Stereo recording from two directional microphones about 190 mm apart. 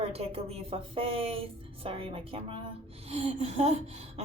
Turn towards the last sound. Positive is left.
turn(degrees=-35)  # may be behind; listen again after turning